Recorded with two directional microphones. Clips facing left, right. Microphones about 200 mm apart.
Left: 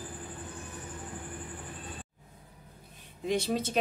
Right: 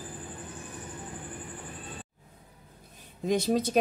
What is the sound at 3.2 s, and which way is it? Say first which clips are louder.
Speech: right 4 dB; 40° right (ahead or behind).